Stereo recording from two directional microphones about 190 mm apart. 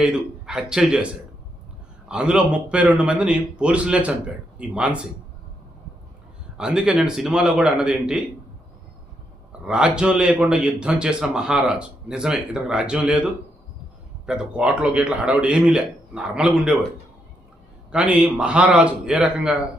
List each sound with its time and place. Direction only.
0.0 s a man's voice: 5° right (ahead or behind)
2.0 s a man's voice: 5° right (ahead or behind)
6.6 s a man's voice: 5° right (ahead or behind)
9.5 s a man's voice: 5° right (ahead or behind)
14.3 s a man's voice: 5° right (ahead or behind)
17.9 s a man's voice: 5° right (ahead or behind)